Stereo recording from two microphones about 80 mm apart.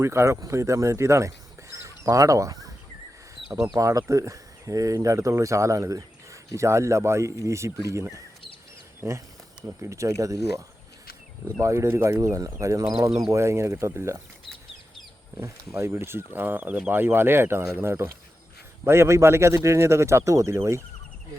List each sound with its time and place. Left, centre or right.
0.0 s speech: right
1.7 s bird: right
3.8 s speech: right
11.6 s speech: right
15.4 s speech: right